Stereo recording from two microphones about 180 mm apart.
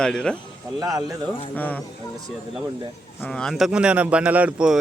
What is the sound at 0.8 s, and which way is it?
Speech, 20° right (ahead or behind).